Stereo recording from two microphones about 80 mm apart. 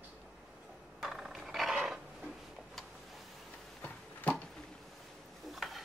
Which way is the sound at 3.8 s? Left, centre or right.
Centre.